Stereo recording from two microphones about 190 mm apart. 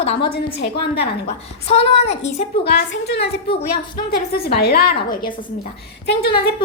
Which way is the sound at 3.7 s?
55° left (ahead or behind).